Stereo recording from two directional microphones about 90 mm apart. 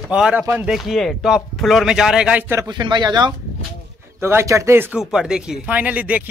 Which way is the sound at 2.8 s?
55° right (ahead or behind).